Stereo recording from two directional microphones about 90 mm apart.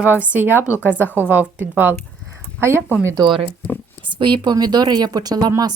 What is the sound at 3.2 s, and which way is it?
A woman's voice, 65° right (ahead or behind).